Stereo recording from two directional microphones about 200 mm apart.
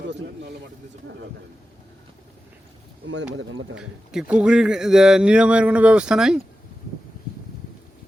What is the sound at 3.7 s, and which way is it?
Speech, 5° right (ahead or behind).